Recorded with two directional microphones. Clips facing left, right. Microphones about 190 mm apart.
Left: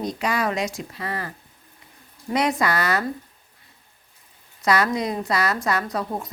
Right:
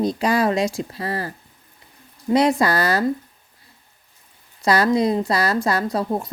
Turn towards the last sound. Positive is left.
turn(degrees=-30)  # may be behind; listen again after turning